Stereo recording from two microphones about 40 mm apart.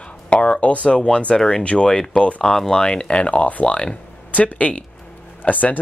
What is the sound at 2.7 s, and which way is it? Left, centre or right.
Speech, centre.